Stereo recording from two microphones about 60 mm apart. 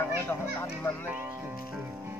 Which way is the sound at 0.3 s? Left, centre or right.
Left.